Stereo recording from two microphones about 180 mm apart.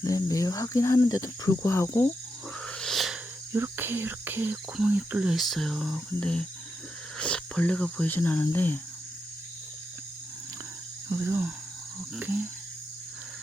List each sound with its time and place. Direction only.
0.0 s speech: 20° left (ahead or behind)
2.6 s a sound: 5° left (ahead or behind)
3.5 s speech: 10° right (ahead or behind); by 8.8 s 10° left (ahead or behind)
11.1 s speech: 15° right (ahead or behind)